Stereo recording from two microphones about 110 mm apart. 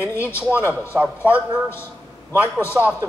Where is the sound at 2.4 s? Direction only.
25° left (ahead or behind).